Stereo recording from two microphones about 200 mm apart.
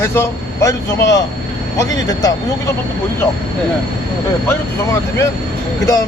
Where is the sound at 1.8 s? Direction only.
20° left (ahead or behind).